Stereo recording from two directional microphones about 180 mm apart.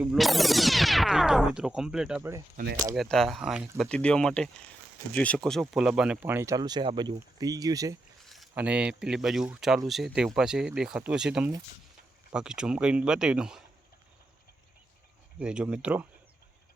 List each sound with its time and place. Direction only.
0.0 s speech: centre (ahead or behind); by 7.9 s 20° right (ahead or behind)
8.2 s speech: centre (ahead or behind)
15.4 s speech: 5° right (ahead or behind)